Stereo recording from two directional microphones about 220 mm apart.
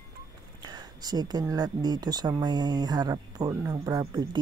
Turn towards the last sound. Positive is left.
turn(degrees=-15)  # may be behind; listen again after turning